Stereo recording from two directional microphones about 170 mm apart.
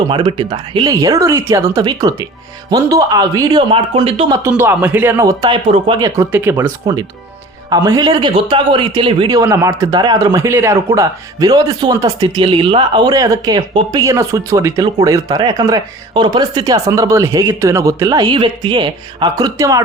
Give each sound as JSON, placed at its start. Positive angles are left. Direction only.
{"t": 0.1, "sound": "speech", "side_deg": -30}
{"t": 4.3, "sound": "speech", "side_deg": -15}
{"t": 7.7, "sound": "speech", "side_deg": -25}